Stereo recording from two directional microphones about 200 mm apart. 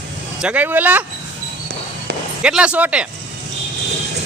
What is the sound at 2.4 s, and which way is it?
Speech, 5° right (ahead or behind).